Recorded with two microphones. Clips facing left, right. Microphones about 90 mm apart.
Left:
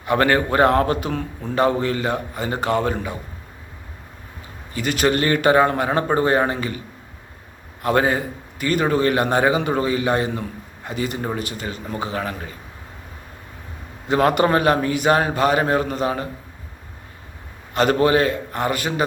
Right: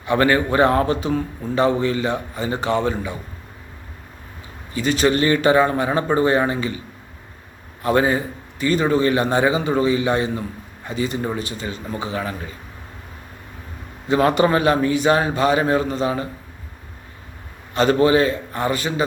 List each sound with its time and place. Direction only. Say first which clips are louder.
0.0 s a man's voice: right 1 dB; 45° left (ahead or behind)
4.7 s a man's voice: right 2 dB; 50° left (ahead or behind)
7.9 s a man's voice: right 1 dB; 45° left (ahead or behind)
11.3 s speech: even; 30° right (ahead or behind)
11.9 s a man's voice: left 1 dB; 40° left (ahead or behind)
14.1 s a man's voice: even; 45° left (ahead or behind)
17.7 s a man's voice: right 1 dB; 50° left (ahead or behind)